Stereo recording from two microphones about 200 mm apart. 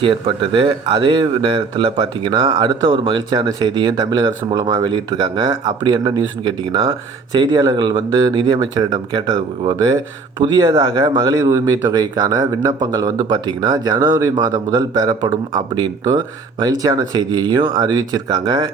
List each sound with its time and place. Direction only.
0.0 s speech: 25° right (ahead or behind)
7.3 s speech: 20° right (ahead or behind)